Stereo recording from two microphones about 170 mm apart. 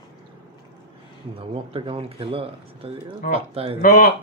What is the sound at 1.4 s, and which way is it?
Speech, 30° right (ahead or behind).